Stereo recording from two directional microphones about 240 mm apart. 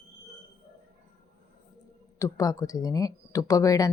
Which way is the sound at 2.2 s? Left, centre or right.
Centre.